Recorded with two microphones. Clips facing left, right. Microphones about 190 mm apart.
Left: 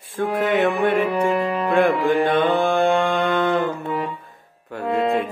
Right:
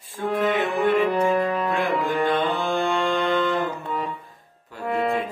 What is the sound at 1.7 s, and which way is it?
Music, 55° left (ahead or behind).